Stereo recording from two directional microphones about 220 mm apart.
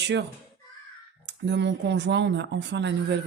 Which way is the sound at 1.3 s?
55° right (ahead or behind).